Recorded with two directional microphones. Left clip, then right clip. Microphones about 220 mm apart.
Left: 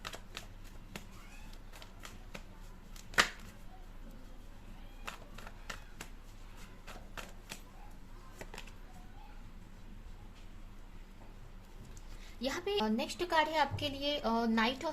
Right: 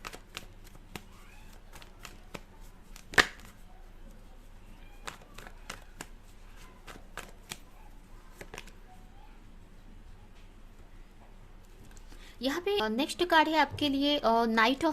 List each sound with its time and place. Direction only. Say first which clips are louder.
1.8 s shuffling cards: right 2 dB; 40° right (ahead or behind)
5.0 s run: right 2 dB; 40° right (ahead or behind)
7.5 s a sound: right 5 dB; 40° right (ahead or behind)
12.4 s a woman's voice: right 5 dB; 35° right (ahead or behind)